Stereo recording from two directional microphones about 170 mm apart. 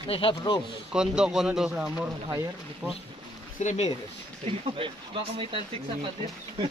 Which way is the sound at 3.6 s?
40° left (ahead or behind).